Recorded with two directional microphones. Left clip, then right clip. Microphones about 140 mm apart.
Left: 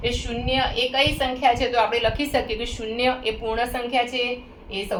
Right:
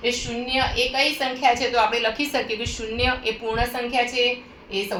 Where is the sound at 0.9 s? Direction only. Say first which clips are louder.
Left 1 dB; 25° left (ahead or behind).